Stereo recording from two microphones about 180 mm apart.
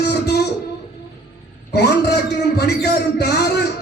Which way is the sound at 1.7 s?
65° left (ahead or behind).